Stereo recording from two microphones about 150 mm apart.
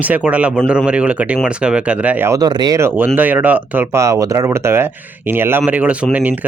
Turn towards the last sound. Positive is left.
turn(degrees=-10)  # may be behind; listen again after turning